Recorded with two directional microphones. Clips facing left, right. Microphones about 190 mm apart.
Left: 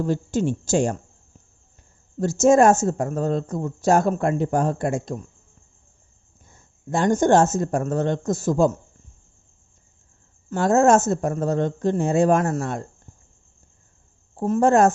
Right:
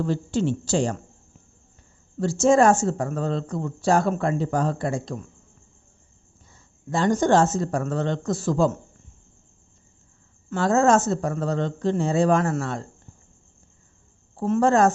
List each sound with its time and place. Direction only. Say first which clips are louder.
0.0 s speech: left 1 dB; 45° left (ahead or behind)
2.4 s speech: left 2 dB; 45° left (ahead or behind)
6.5 s speech: left 2 dB; 50° left (ahead or behind)
10.5 s speech: left 2 dB; 45° left (ahead or behind)
14.4 s speech: left 2 dB; 45° left (ahead or behind)